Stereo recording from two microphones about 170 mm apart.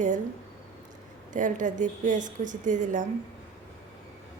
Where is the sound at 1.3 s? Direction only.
50° right (ahead or behind).